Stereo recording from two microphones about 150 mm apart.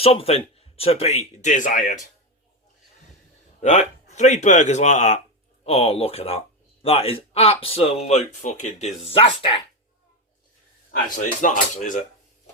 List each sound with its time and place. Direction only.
0.0 s speech: 40° left (ahead or behind); by 2.0 s 55° left (ahead or behind)
3.6 s speech: 50° left (ahead or behind)
5.6 s speech: 40° left (ahead or behind)
9.0 s speech: 35° left (ahead or behind)
11.1 s speech: 60° left (ahead or behind)